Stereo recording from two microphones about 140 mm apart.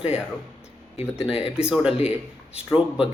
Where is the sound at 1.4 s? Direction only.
5° right (ahead or behind).